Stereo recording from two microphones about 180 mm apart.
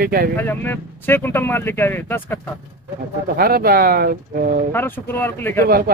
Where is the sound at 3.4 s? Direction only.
55° right (ahead or behind).